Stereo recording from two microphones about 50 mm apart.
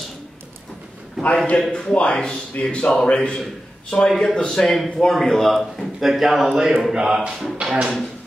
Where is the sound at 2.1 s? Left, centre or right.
Centre.